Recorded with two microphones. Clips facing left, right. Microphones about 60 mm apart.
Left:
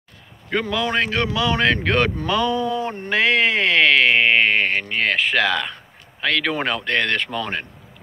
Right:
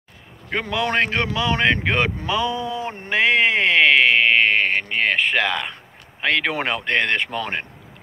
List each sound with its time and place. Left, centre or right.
0.5 s speech: centre
0.8 s speech: right; by 4.0 s centre
4.1 s a sound: centre
6.2 s speech: right